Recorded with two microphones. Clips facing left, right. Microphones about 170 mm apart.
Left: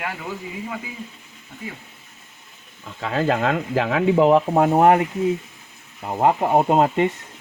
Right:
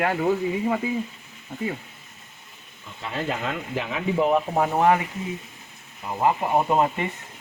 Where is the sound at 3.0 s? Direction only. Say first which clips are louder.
Left 8 dB; 90° left.